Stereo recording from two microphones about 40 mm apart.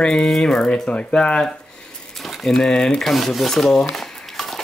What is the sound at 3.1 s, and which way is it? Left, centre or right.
Speech, centre.